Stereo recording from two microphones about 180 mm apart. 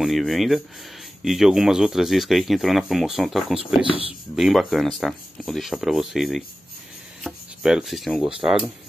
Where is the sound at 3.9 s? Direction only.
30° right (ahead or behind).